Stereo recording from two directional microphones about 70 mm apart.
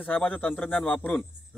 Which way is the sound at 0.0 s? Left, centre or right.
Left.